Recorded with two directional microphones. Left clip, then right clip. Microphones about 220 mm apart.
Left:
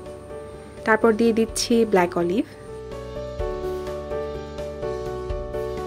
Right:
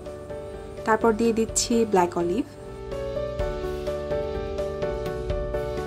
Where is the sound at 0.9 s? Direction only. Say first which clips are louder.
Left 3 dB; 5° left (ahead or behind).